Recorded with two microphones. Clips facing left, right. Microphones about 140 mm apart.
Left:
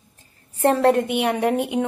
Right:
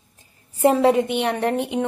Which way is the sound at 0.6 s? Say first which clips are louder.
Right 1 dB; 5° right (ahead or behind).